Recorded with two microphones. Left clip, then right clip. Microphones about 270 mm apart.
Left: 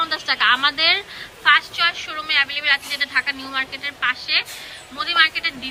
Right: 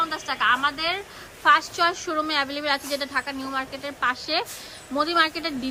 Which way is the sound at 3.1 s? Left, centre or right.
Centre.